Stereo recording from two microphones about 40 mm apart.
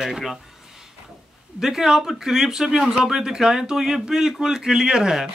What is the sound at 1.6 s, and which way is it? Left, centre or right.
A man's voice, centre.